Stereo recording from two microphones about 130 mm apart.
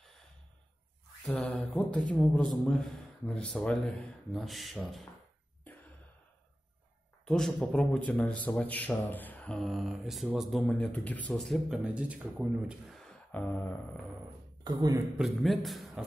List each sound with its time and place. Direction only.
1.2 s a man's voice: 5° left (ahead or behind)
7.2 s a man's voice: 5° left (ahead or behind)
14.6 s speech: 30° right (ahead or behind)
15.1 s a man's voice: centre (ahead or behind)